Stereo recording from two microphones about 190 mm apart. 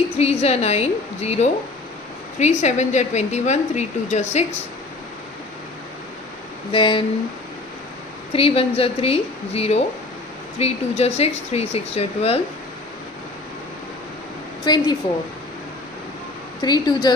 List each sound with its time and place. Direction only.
0.2 s a woman's voice: 35° left (ahead or behind)
6.7 s a woman's voice: 30° left (ahead or behind)
8.3 s a woman's voice: 30° left (ahead or behind)
14.6 s a woman's voice: 20° left (ahead or behind)
16.6 s a woman's voice: 20° left (ahead or behind)